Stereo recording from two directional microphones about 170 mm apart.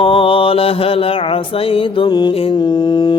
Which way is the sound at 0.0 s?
30° left (ahead or behind).